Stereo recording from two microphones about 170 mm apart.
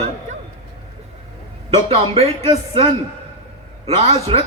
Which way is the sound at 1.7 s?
35° right (ahead or behind).